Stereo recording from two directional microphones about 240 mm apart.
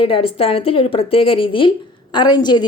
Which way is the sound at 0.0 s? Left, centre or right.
Left.